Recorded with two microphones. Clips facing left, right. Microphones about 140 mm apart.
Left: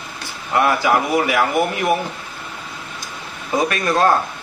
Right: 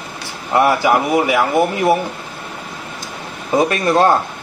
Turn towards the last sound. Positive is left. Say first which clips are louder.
# right 3 dB
turn(degrees=-25)  # may be behind; listen again after turning